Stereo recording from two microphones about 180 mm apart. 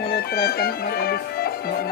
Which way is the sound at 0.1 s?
60° left (ahead or behind).